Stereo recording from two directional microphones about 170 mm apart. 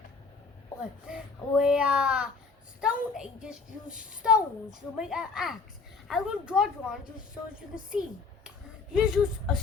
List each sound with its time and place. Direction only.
1.0 s a child's voice: 5° right (ahead or behind)
9.0 s a child's voice: centre (ahead or behind)